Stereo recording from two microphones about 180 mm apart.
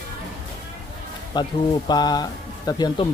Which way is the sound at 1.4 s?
25° left (ahead or behind).